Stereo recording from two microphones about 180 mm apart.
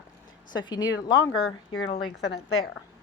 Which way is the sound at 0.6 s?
25° left (ahead or behind).